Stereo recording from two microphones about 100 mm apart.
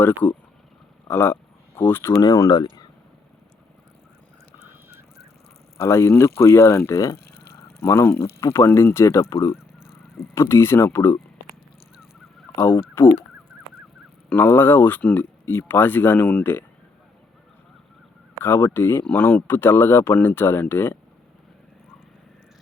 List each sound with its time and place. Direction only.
1.0 s a sound: 20° left (ahead or behind)
2.1 s speech: 40° left (ahead or behind)
5.7 s speech: 30° left (ahead or behind)
12.5 s speech: 25° left (ahead or behind)
14.3 s speech: 20° left (ahead or behind)
18.4 s speech: 25° left (ahead or behind)